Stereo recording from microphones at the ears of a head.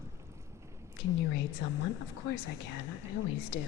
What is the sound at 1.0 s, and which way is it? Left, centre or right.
Speech, left.